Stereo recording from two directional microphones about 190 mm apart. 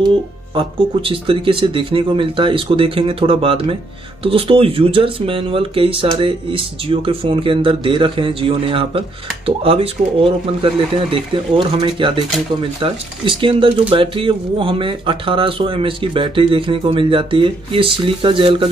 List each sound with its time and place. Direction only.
0.6 s speech: 25° right (ahead or behind)